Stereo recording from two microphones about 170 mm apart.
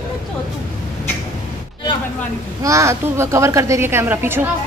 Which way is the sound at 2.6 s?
15° right (ahead or behind).